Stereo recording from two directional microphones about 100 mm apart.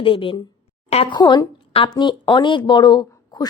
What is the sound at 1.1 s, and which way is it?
A woman's voice, 45° left (ahead or behind).